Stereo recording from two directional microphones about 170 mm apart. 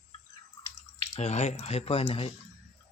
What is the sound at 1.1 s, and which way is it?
Speech, 40° left (ahead or behind).